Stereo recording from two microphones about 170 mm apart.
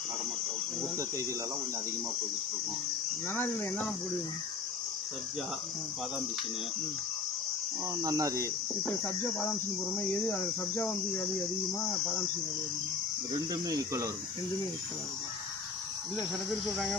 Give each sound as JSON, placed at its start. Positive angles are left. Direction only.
{"t": 3.3, "sound": "speech", "side_deg": 10}
{"t": 8.0, "sound": "speech", "side_deg": -20}
{"t": 8.8, "sound": "speech", "side_deg": 10}
{"t": 13.5, "sound": "speech", "side_deg": -20}